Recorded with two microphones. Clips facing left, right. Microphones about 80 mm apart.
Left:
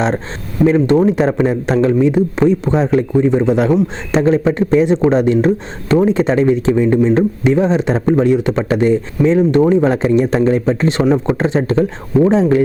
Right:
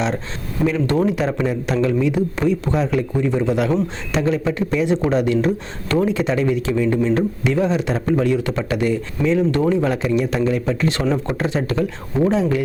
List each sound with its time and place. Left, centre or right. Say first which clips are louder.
0.6 s a man's voice: left 7 dB; left
6.1 s a man's voice: left 6 dB; left